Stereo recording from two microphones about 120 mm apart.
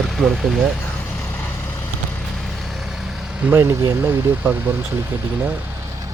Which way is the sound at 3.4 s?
20° right (ahead or behind).